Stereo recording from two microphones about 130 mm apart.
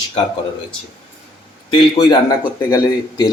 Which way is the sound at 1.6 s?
40° left (ahead or behind).